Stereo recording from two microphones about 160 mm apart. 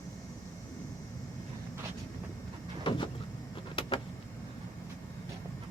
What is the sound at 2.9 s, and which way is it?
Vehicle, 35° left (ahead or behind).